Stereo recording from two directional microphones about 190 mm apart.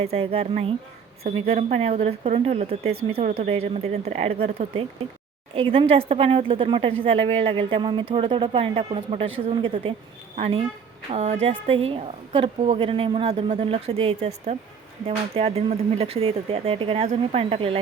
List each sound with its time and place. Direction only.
0.0 s a woman's voice: 30° right (ahead or behind)